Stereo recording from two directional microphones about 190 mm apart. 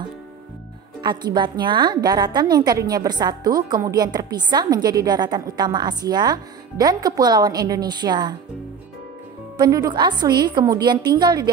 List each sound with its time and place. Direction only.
1.0 s a woman's voice: 25° right (ahead or behind)
9.6 s a woman's voice: 20° right (ahead or behind)